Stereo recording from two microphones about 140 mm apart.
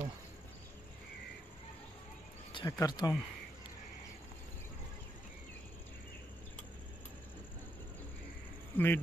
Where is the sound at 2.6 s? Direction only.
25° left (ahead or behind).